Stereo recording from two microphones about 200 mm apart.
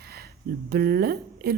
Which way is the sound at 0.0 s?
50° right (ahead or behind).